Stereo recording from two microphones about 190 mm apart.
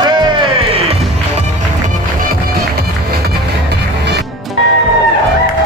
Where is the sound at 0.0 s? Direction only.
25° right (ahead or behind).